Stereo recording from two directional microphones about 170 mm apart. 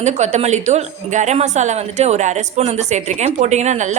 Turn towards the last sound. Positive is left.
turn(degrees=-45)  # may be behind; listen again after turning